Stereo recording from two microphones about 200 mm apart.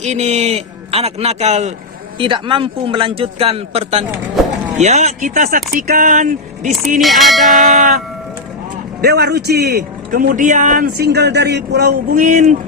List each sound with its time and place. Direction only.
0.0 s a man's voice: 35° right (ahead or behind)
7.0 s speech: centre (ahead or behind)
7.5 s a man's voice: 40° right (ahead or behind)
12.1 s speech: 40° right (ahead or behind)